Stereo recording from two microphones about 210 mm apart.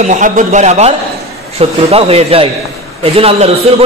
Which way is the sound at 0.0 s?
35° right (ahead or behind).